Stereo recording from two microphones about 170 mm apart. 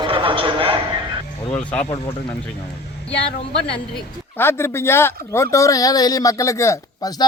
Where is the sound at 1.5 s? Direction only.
10° left (ahead or behind).